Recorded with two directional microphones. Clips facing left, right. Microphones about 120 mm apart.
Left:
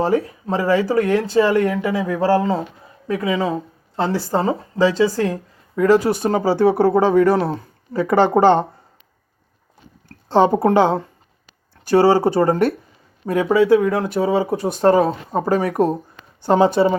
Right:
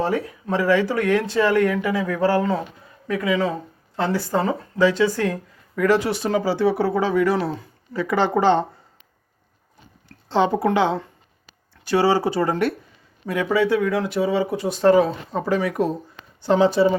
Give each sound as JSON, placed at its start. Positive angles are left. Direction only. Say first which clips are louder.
{"t": 0.0, "sound": "a woman's voice", "louder": "left 4 dB", "side_deg": 30}
{"t": 6.0, "sound": "speech", "louder": "left 3 dB", "side_deg": 45}
{"t": 10.1, "sound": "a woman's voice", "louder": "left 5 dB", "side_deg": 45}